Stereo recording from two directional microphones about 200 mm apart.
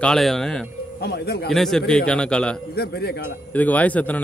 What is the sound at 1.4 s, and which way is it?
Speech, centre (ahead or behind).